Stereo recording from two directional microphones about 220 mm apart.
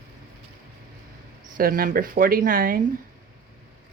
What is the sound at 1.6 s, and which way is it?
Speech, 40° right (ahead or behind).